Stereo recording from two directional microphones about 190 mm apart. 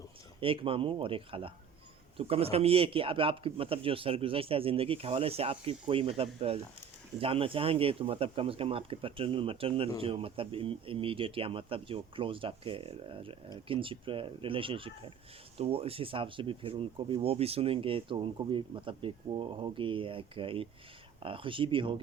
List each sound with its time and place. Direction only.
0.3 s speech: 30° right (ahead or behind)